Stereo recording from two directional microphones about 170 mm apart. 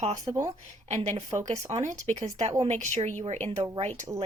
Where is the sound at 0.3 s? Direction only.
30° right (ahead or behind).